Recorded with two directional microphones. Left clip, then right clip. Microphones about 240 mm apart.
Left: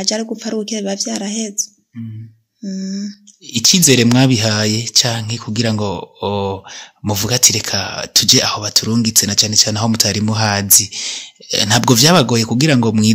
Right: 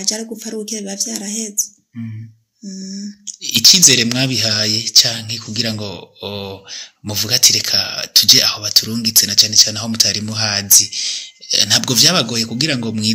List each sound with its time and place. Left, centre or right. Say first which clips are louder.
0.0 s speech: left 3 dB; left
2.6 s speech: left 4 dB; left